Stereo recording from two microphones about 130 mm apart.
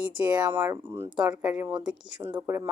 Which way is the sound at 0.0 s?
10° right (ahead or behind).